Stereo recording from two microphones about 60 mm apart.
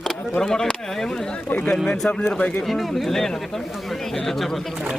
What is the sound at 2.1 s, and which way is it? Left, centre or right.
Speech, left.